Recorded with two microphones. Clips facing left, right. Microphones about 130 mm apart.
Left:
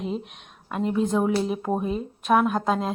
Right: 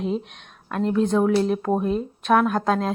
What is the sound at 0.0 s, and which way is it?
A woman's voice, 5° left (ahead or behind).